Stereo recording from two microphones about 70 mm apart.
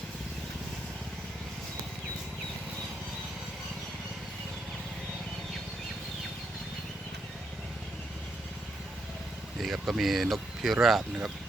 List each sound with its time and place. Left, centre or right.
9.6 s speech: centre